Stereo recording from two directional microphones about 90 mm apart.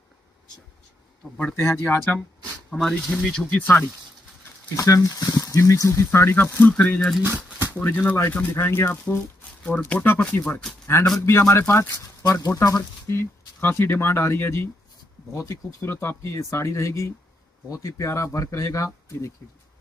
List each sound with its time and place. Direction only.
1.5 s speech: 30° left (ahead or behind)
3.0 s speech: 5° right (ahead or behind)
3.3 s speech: 5° left (ahead or behind)
3.5 s speech: 15° left (ahead or behind)
4.6 s speech: 40° left (ahead or behind); by 6.7 s 20° left (ahead or behind)
6.7 s speech: 10° left (ahead or behind)
7.2 s a sound: 20° right (ahead or behind)
7.8 s speech: 20° left (ahead or behind)
11.1 s speech: 30° left (ahead or behind)
12.2 s speech: 45° left (ahead or behind)